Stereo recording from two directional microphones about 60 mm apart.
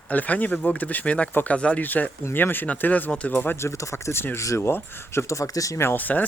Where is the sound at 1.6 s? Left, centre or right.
Centre.